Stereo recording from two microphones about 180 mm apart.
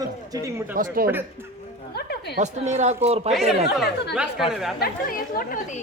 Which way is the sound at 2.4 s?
40° right (ahead or behind).